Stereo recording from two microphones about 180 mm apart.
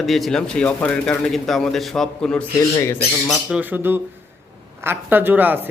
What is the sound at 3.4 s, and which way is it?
Speech, 5° right (ahead or behind).